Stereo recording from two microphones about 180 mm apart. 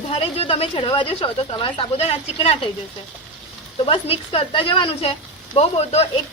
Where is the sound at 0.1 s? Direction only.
35° left (ahead or behind).